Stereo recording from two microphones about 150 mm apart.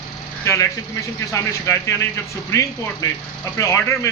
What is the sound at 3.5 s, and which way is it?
Speech, 20° left (ahead or behind).